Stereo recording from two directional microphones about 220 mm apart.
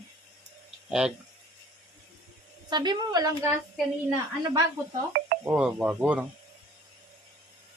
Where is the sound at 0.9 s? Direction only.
5° right (ahead or behind).